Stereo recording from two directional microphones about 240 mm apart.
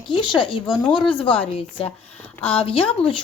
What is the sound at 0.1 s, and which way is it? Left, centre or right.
Speech, centre.